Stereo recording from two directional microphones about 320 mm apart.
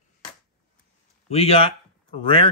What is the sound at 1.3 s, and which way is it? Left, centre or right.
Speech, centre.